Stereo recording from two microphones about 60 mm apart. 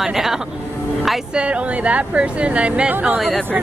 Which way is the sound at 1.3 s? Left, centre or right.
Centre.